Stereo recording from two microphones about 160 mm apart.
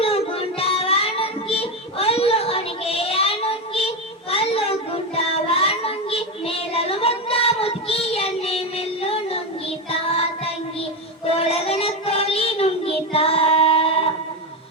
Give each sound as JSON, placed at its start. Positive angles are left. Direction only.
{"t": 0.0, "sound": "child singing", "side_deg": 35}
{"t": 9.9, "sound": "music", "side_deg": 40}
{"t": 11.3, "sound": "child singing", "side_deg": 40}